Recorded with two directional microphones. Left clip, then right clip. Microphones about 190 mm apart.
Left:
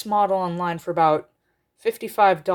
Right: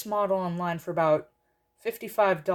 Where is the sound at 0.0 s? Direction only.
40° left (ahead or behind).